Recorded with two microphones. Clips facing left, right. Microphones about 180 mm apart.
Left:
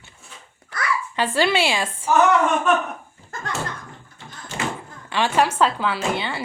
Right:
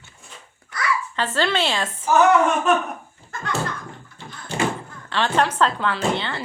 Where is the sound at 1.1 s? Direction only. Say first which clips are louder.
Left 4 dB; 10° left (ahead or behind).